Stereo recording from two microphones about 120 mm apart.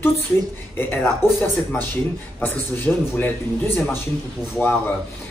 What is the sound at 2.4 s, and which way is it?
Speech, 15° left (ahead or behind).